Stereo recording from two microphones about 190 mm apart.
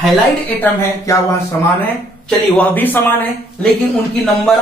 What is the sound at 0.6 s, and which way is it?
Speech, 15° left (ahead or behind).